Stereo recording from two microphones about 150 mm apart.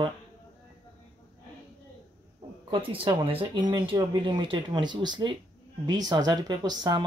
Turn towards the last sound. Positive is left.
turn(degrees=-25)  # may be behind; listen again after turning